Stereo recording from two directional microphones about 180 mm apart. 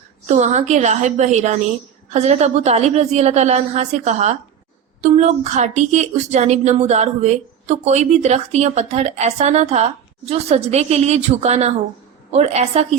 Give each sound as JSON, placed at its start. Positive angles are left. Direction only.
{"t": 0.3, "sound": "a woman's voice", "side_deg": -40}